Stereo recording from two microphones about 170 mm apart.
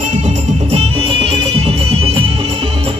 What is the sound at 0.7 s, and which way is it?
Music, 35° right (ahead or behind).